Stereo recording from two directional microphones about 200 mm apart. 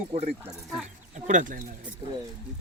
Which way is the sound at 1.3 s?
40° right (ahead or behind).